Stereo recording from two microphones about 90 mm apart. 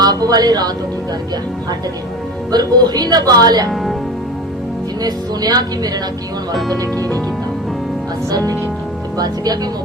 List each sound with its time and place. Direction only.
0.0 s music: 45° right (ahead or behind)
2.5 s speech: 50° right (ahead or behind)
5.0 s speech: 45° right (ahead or behind)
8.3 s speech: 45° right (ahead or behind)